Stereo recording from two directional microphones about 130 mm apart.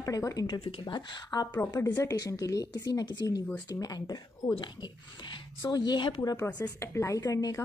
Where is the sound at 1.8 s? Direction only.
20° left (ahead or behind); by 6.2 s 40° left (ahead or behind).